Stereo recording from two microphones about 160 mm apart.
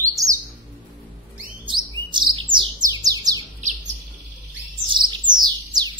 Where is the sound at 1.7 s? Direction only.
30° right (ahead or behind).